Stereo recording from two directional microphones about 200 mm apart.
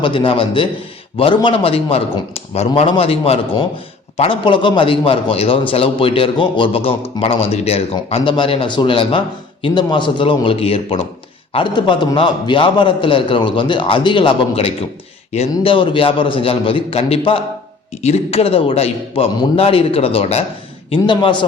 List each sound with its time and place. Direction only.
0.0 s a man's voice: 25° left (ahead or behind)